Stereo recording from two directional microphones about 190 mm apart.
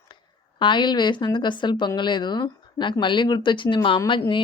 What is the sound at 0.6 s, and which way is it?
Speech, 25° left (ahead or behind).